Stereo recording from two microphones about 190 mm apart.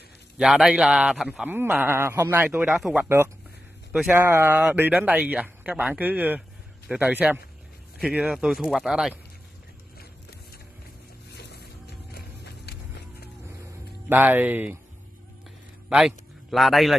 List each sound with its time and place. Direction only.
0.4 s a man's voice: centre (ahead or behind)
11.3 s music: 60° left (ahead or behind)
14.0 s a man's voice: 10° right (ahead or behind)
15.9 s speech: 5° right (ahead or behind)